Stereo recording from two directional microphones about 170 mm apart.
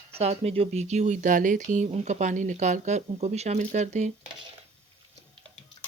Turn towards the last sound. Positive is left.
turn(degrees=-45)  # may be behind; listen again after turning